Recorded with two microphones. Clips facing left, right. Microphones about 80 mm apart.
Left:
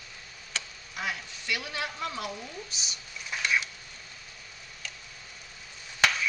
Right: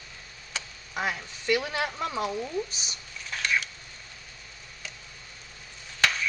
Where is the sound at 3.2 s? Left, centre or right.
Centre.